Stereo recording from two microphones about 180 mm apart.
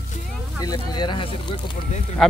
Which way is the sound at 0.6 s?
20° left (ahead or behind).